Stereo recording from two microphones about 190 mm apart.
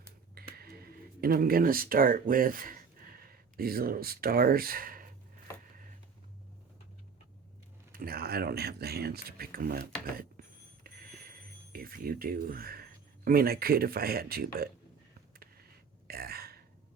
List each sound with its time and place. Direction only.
0.0 s a sound: 55° right (ahead or behind)
3.6 s speech: 50° right (ahead or behind)
7.9 s speech: 50° right (ahead or behind)
10.8 s a sound: 50° right (ahead or behind)
11.7 s speech: 50° right (ahead or behind)
16.0 s burping: 55° right (ahead or behind)